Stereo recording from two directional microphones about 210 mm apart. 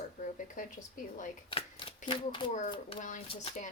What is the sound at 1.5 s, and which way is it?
A woman's voice, 25° left (ahead or behind).